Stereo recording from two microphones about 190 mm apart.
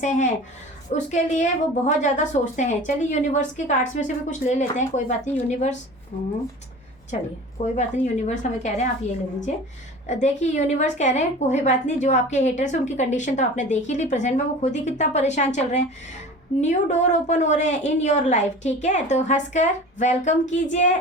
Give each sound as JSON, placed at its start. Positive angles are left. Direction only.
{"t": 0.0, "sound": "a woman's voice", "side_deg": 40}
{"t": 10.1, "sound": "a woman's voice", "side_deg": 40}